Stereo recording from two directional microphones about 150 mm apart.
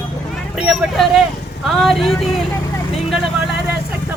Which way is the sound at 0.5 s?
5° right (ahead or behind).